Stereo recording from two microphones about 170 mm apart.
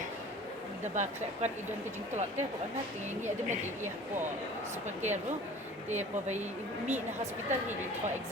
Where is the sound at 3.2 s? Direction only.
45° right (ahead or behind).